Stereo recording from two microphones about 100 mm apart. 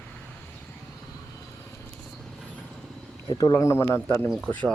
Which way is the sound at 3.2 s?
40° left (ahead or behind).